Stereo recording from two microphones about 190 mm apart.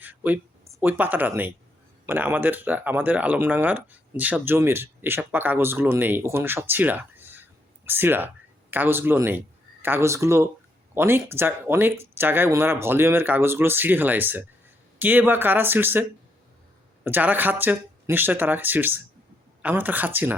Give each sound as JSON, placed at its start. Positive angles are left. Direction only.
{"t": 0.0, "sound": "speech", "side_deg": -10}